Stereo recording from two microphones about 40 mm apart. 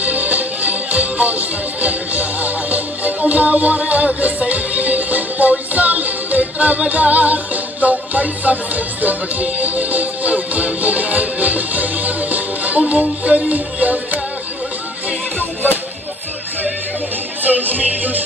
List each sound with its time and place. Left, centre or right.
0.0 s music: right
17.4 s music: right